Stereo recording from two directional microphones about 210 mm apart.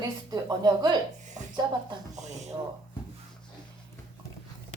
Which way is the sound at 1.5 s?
20° right (ahead or behind).